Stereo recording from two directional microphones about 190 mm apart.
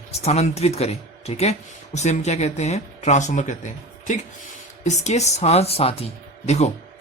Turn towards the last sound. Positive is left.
turn(degrees=35)  # may be behind; listen again after turning